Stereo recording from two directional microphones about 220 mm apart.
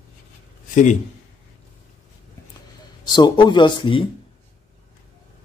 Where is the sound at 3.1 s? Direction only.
20° left (ahead or behind).